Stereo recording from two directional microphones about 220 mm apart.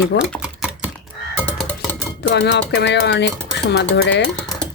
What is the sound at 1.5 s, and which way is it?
Music, 5° left (ahead or behind).